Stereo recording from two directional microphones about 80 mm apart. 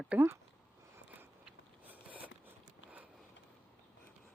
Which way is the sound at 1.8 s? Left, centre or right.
Right.